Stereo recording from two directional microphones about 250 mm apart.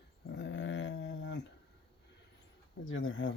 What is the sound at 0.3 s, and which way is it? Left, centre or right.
Dog, left.